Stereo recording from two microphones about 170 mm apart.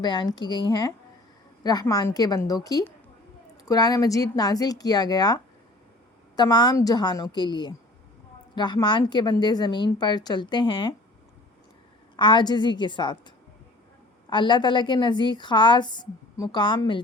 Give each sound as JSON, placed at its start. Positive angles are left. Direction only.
{"t": 0.0, "sound": "a woman's voice", "side_deg": 25}
{"t": 12.1, "sound": "a woman's voice", "side_deg": 25}
{"t": 14.3, "sound": "a woman's voice", "side_deg": 25}